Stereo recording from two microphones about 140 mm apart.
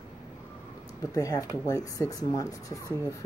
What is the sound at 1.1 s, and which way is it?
Speech, 25° left (ahead or behind).